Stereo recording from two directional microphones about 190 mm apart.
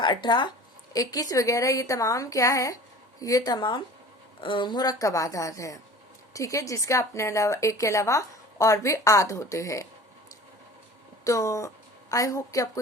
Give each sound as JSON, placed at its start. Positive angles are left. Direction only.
{"t": 0.0, "sound": "a woman's voice", "side_deg": 25}
{"t": 11.2, "sound": "a woman's voice", "side_deg": 15}